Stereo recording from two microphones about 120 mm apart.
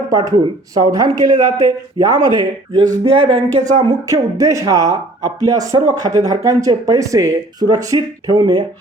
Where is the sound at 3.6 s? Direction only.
90° right.